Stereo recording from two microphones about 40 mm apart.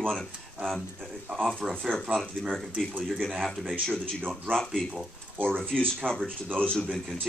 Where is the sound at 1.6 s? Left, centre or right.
Centre.